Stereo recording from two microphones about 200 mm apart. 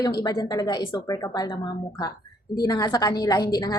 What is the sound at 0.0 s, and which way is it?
A woman's voice, 20° left (ahead or behind).